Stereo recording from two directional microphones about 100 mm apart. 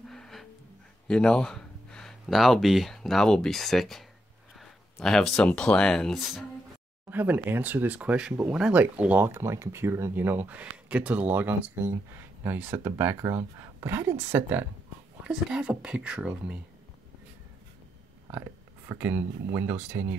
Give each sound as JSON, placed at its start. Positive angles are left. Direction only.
{"t": 0.1, "sound": "music", "side_deg": 5}
{"t": 1.0, "sound": "speech", "side_deg": 10}
{"t": 5.0, "sound": "speech", "side_deg": 5}
{"t": 7.1, "sound": "a woman's voice", "side_deg": -20}
{"t": 18.3, "sound": "speech", "side_deg": -20}